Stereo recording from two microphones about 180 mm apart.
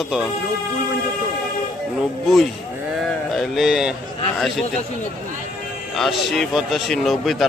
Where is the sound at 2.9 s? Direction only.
Centre (ahead or behind).